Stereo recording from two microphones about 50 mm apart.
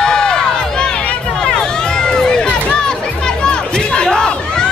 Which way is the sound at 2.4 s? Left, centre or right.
Left.